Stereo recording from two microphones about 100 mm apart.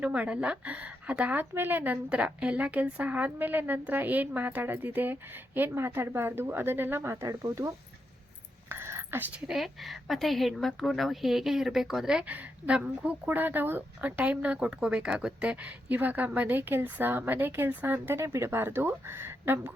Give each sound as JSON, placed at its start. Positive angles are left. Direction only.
{"t": 0.0, "sound": "a woman's voice", "side_deg": -10}
{"t": 7.3, "sound": "speech", "side_deg": -35}
{"t": 8.7, "sound": "a sound", "side_deg": -25}
{"t": 9.3, "sound": "a woman's voice", "side_deg": -5}